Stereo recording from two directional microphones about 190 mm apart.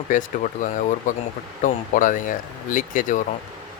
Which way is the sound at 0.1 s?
40° left (ahead or behind).